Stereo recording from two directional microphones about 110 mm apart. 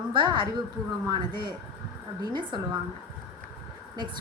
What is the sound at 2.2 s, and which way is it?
Speech, 45° right (ahead or behind).